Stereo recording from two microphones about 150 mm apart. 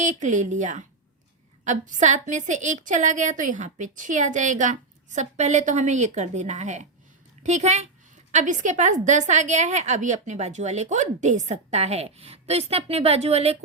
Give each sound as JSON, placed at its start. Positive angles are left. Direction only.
{"t": 0.0, "sound": "a woman's voice", "side_deg": -55}